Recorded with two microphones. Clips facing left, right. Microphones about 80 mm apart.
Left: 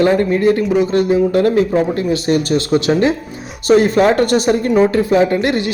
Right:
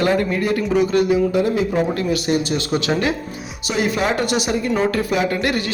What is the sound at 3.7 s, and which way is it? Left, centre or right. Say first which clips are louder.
Speech: left 9 dB; left.